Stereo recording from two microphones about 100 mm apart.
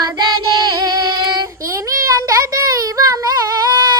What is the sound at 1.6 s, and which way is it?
Child singing, 30° right (ahead or behind).